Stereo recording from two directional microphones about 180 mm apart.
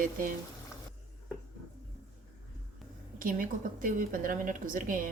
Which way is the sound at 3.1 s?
50° right (ahead or behind).